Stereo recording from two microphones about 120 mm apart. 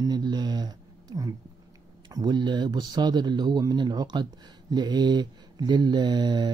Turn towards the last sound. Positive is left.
turn(degrees=-35)  # may be behind; listen again after turning